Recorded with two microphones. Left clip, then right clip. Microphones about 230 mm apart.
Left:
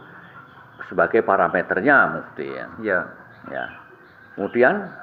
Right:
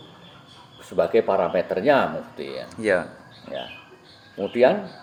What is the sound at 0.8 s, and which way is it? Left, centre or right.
Speech, left.